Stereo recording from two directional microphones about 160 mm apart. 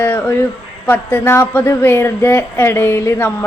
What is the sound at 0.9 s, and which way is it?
Speech, 15° left (ahead or behind).